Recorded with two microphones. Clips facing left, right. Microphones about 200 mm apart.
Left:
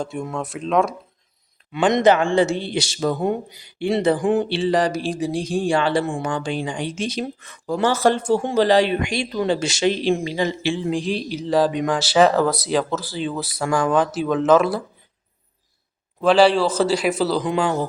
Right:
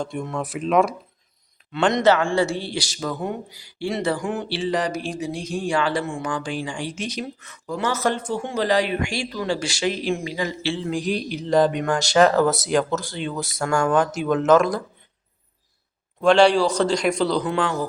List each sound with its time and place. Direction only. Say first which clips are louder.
0.0 s speech: left 1 dB; 5° left (ahead or behind)
1.9 s speech: left 3 dB; 20° left (ahead or behind)
4.6 s speech: left 4 dB; 30° left (ahead or behind)
10.6 s a man's voice: left 3 dB; 15° left (ahead or behind)
11.3 s speech: even; 5° left (ahead or behind)
16.2 s speech: even; 5° left (ahead or behind)
17.5 s a man's voice: left 2 dB; 15° left (ahead or behind)